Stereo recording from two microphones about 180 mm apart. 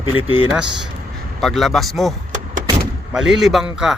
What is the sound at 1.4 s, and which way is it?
Speech, centre (ahead or behind).